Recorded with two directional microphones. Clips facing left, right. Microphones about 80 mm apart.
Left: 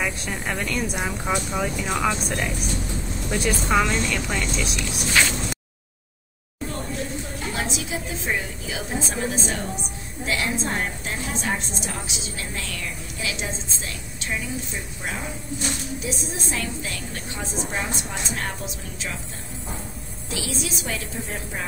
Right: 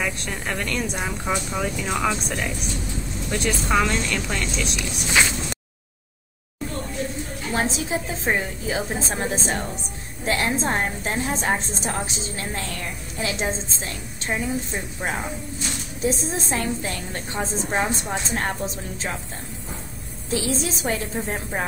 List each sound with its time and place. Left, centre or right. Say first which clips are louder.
0.0 s speech: even; centre
5.2 s a sound: right 1 dB; centre
7.5 s a woman's voice: right 6 dB; right
20.2 s a woman's voice: right 5 dB; right